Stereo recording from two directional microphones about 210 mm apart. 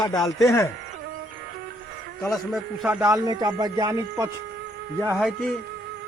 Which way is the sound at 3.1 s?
15° right (ahead or behind).